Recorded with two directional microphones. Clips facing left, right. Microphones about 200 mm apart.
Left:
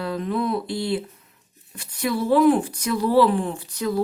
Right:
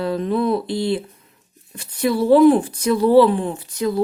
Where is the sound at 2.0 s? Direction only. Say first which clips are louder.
Right 5 dB; 30° right (ahead or behind).